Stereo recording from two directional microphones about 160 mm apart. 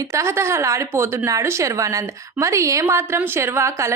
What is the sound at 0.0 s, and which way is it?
A woman's voice, 20° right (ahead or behind).